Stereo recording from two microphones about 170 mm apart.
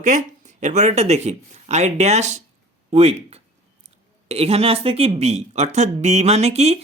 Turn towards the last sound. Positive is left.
turn(degrees=-40)  # may be behind; listen again after turning